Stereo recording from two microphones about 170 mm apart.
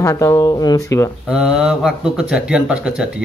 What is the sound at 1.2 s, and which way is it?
A man's voice, 5° right (ahead or behind).